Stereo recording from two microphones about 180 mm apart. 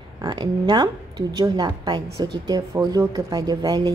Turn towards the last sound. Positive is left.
turn(degrees=-20)  # may be behind; listen again after turning